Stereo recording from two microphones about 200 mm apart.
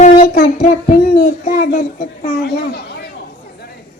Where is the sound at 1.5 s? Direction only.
45° left (ahead or behind).